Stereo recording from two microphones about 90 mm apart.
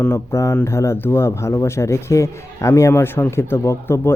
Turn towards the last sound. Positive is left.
turn(degrees=30)  # may be behind; listen again after turning